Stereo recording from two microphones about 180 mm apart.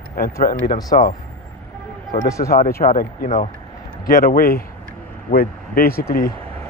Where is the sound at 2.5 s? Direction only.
55° left (ahead or behind).